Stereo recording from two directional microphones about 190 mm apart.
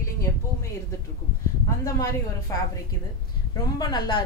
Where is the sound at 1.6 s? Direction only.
15° left (ahead or behind).